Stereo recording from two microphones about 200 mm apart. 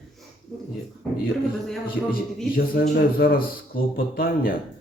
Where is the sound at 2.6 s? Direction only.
45° left (ahead or behind).